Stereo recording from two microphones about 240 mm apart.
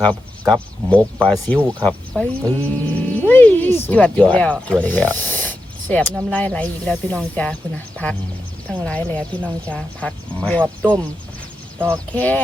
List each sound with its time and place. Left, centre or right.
0.0 s speech: centre